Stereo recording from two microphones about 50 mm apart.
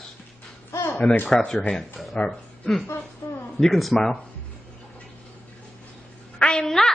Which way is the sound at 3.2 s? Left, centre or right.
Left.